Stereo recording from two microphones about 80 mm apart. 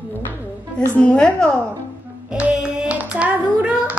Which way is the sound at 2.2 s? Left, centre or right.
Centre.